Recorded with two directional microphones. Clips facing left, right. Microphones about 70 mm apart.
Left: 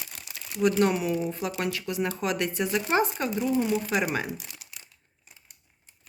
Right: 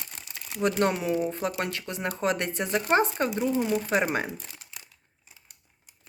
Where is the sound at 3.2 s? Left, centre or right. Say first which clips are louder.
Even; right.